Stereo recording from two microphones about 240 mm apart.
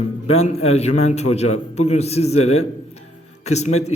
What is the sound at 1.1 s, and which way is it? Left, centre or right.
A man's voice, left.